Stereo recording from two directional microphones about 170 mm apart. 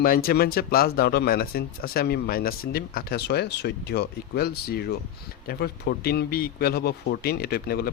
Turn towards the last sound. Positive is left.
turn(degrees=65)  # may be behind; listen again after turning